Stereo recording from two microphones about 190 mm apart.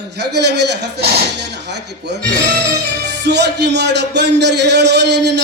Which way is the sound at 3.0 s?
65° right (ahead or behind).